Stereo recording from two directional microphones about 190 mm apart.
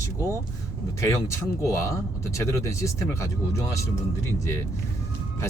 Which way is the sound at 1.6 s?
15° left (ahead or behind).